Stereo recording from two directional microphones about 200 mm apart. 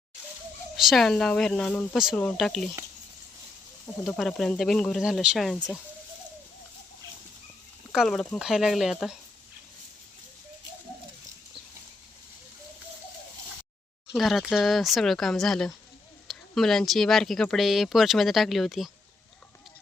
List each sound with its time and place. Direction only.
0.8 s speech: centre (ahead or behind)
4.0 s speech: centre (ahead or behind)
7.9 s speech: centre (ahead or behind)
14.1 s speech: centre (ahead or behind)